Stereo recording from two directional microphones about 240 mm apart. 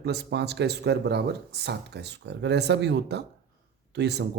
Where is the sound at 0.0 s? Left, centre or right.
Right.